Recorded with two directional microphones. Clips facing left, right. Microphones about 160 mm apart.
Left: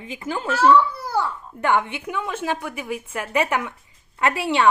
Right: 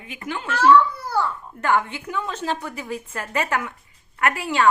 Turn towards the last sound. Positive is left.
turn(degrees=20)  # may be behind; listen again after turning